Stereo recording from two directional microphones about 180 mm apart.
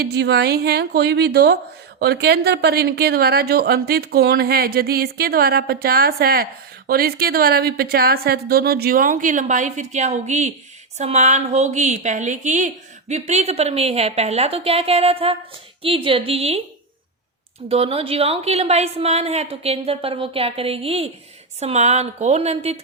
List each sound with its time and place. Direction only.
0.0 s a woman's voice: 65° right (ahead or behind); by 16.6 s 35° right (ahead or behind)
17.7 s a woman's voice: 35° right (ahead or behind)